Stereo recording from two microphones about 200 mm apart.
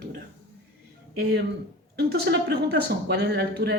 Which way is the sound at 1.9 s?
55° right (ahead or behind).